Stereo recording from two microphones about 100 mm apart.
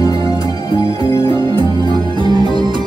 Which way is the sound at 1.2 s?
50° right (ahead or behind).